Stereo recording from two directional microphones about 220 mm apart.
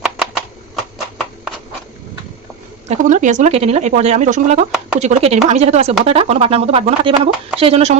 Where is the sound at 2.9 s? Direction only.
35° right (ahead or behind).